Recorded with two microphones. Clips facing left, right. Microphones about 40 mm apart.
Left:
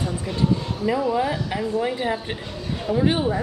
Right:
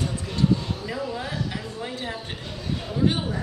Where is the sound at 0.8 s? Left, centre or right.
Left.